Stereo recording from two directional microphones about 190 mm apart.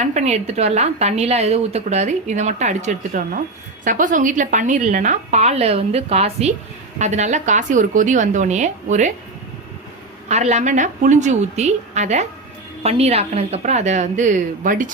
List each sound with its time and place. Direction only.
0.0 s a woman's voice: 35° right (ahead or behind)
10.2 s a woman's voice: 35° right (ahead or behind)